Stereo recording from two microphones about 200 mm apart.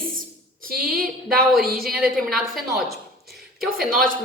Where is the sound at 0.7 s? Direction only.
45° right (ahead or behind).